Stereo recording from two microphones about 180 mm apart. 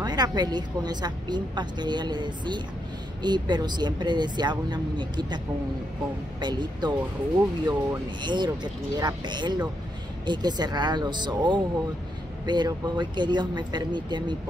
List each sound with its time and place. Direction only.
0.0 s speech: 20° right (ahead or behind)
6.4 s speech: 25° right (ahead or behind)